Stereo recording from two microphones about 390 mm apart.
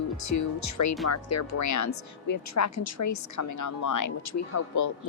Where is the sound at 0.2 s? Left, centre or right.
Left.